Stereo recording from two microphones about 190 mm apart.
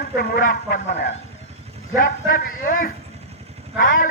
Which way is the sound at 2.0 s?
45° left (ahead or behind).